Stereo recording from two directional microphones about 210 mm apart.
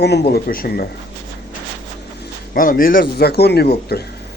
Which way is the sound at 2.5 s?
40° left (ahead or behind).